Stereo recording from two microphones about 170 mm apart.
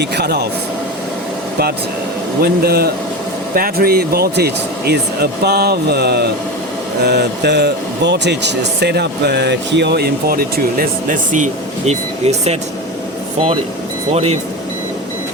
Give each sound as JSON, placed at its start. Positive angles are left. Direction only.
{"t": 0.0, "sound": "speech", "side_deg": -80}
{"t": 2.4, "sound": "a man's voice", "side_deg": -65}
{"t": 11.9, "sound": "speech", "side_deg": -40}
{"t": 14.1, "sound": "speech", "side_deg": -40}